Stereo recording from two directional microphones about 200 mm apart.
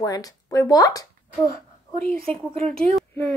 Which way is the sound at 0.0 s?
20° left (ahead or behind).